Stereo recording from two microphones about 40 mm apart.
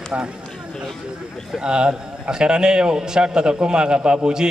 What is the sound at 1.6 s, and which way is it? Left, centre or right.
A man's voice, right.